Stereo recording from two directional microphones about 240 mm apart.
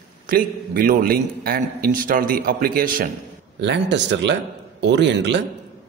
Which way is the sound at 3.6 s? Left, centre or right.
Right.